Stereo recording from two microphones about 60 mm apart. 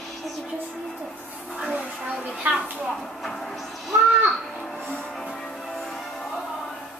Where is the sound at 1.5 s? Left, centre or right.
Centre.